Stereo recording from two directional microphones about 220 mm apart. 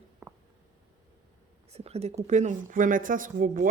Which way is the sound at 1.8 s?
30° right (ahead or behind).